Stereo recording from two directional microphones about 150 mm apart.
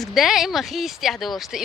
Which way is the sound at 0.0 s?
Centre (ahead or behind).